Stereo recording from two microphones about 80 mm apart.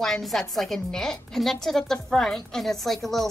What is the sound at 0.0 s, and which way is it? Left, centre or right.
A woman's voice, centre.